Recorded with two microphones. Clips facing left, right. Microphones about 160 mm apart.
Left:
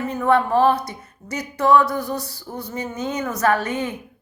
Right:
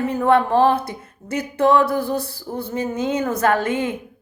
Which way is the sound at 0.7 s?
55° right (ahead or behind).